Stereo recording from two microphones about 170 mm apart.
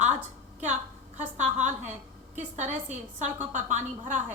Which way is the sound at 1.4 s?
45° right (ahead or behind).